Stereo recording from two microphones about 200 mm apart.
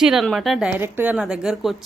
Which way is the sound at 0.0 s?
Centre (ahead or behind).